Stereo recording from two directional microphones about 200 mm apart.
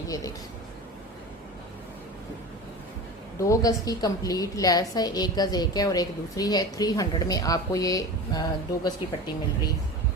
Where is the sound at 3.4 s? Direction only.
15° left (ahead or behind).